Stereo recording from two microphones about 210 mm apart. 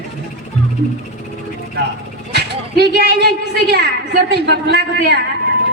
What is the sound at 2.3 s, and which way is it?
A man's voice, 50° right (ahead or behind).